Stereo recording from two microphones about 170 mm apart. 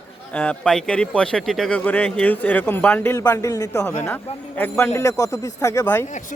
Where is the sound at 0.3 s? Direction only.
5° left (ahead or behind).